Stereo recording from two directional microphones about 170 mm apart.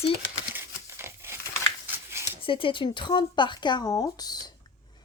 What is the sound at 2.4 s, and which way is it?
Speech, 30° left (ahead or behind).